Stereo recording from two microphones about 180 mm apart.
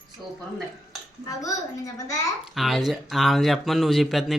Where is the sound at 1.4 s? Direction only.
20° left (ahead or behind).